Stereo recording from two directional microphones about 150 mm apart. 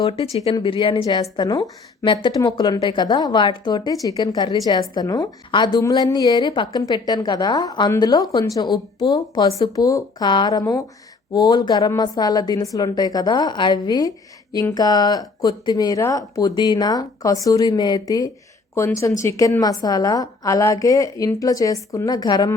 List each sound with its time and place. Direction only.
0.0 s speech: 40° left (ahead or behind)
1.0 s a woman's voice: 25° left (ahead or behind)